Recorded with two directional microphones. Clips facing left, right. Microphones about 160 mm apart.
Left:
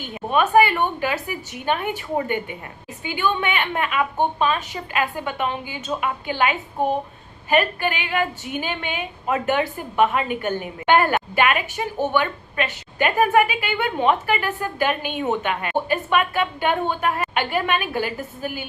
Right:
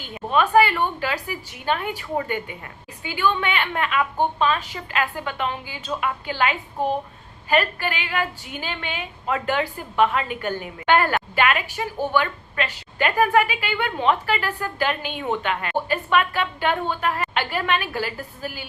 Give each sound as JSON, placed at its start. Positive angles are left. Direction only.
{"t": 0.3, "sound": "a woman's voice", "side_deg": 20}